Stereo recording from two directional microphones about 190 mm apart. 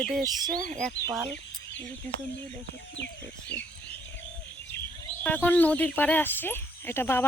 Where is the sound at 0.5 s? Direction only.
45° right (ahead or behind).